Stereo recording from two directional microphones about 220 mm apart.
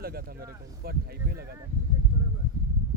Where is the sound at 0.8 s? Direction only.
45° right (ahead or behind).